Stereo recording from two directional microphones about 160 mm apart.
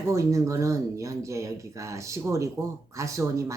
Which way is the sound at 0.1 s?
20° right (ahead or behind).